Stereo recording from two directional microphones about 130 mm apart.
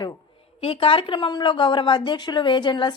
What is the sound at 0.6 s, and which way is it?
Speech, 40° left (ahead or behind).